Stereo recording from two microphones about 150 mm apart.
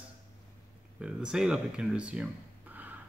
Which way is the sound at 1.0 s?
5° right (ahead or behind).